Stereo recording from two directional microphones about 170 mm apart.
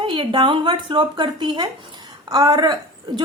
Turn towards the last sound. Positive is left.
turn(degrees=-25)  # may be behind; listen again after turning